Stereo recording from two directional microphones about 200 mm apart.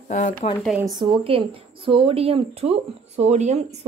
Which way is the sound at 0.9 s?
25° right (ahead or behind).